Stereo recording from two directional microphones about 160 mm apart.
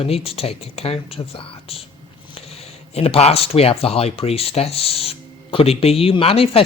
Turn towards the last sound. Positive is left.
turn(degrees=35)  # may be behind; listen again after turning